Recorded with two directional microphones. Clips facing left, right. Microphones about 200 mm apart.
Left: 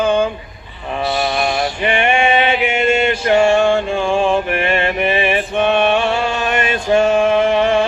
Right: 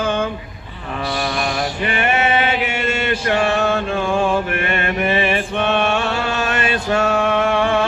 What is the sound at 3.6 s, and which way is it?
Mantra, 25° left (ahead or behind).